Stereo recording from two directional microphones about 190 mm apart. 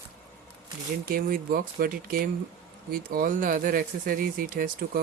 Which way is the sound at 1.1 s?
50° right (ahead or behind).